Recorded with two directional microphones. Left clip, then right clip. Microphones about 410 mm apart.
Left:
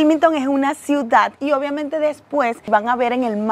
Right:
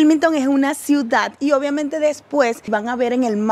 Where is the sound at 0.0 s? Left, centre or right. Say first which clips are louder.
Even; left.